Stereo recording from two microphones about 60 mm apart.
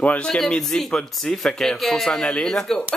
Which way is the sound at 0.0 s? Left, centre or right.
Left.